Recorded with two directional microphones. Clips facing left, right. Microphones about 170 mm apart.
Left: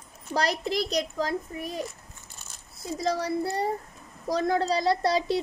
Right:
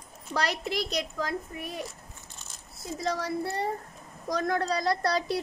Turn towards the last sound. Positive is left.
turn(degrees=25)  # may be behind; listen again after turning